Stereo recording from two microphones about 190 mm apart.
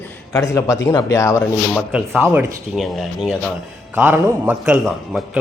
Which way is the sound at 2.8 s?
Centre (ahead or behind).